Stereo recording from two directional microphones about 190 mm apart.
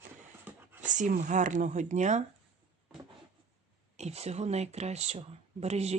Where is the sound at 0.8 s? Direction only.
40° right (ahead or behind).